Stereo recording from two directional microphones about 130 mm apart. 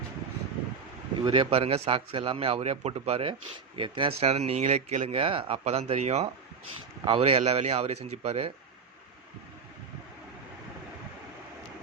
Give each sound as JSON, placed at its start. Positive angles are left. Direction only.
{"t": 1.2, "sound": "a man's voice", "side_deg": -45}
{"t": 5.1, "sound": "a man's voice", "side_deg": -45}
{"t": 7.0, "sound": "a man's voice", "side_deg": -45}